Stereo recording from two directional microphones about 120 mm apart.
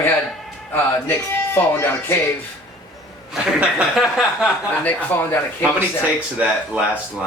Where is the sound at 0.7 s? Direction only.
15° left (ahead or behind).